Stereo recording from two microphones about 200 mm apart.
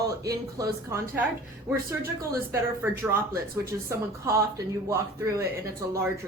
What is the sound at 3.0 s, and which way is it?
Speech, 15° right (ahead or behind).